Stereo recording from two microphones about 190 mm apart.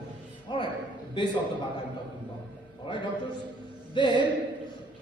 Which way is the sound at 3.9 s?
25° left (ahead or behind).